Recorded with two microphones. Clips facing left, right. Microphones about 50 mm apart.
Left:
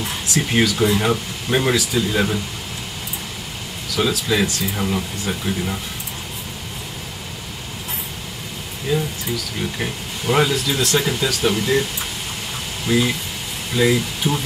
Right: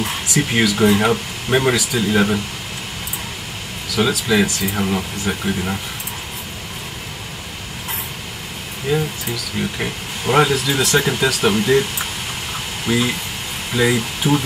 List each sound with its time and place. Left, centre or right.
0.3 s speech: centre
0.7 s speech: right
4.0 s speech: centre
8.9 s a sound: centre
9.3 s speech: right
9.6 s speech: centre; by 11.6 s right
12.9 s speech: right
13.7 s speech: right